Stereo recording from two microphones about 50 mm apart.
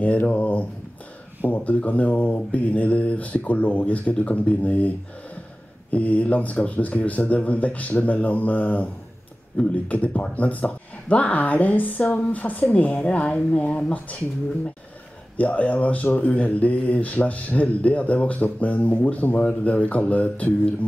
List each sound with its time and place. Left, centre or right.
0.0 s speech: left
15.3 s speech: left